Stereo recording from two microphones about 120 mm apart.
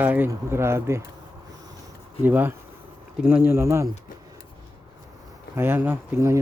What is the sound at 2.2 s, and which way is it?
Speech, 15° right (ahead or behind).